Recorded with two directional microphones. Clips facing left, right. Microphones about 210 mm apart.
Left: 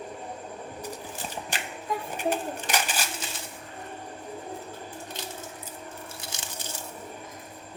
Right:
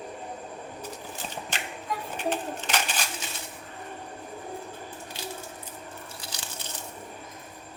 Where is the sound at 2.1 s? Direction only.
10° left (ahead or behind).